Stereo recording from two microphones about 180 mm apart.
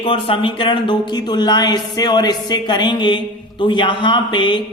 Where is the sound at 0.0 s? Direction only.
30° left (ahead or behind).